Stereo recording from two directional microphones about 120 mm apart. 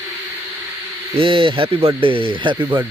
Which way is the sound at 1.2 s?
45° right (ahead or behind).